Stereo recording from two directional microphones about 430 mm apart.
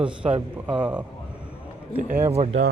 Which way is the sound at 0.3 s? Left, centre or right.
Centre.